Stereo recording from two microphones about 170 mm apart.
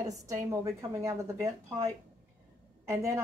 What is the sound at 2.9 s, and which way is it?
Speech, 15° right (ahead or behind).